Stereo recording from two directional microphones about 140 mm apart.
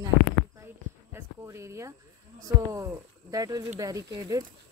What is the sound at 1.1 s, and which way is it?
Speech, 20° right (ahead or behind).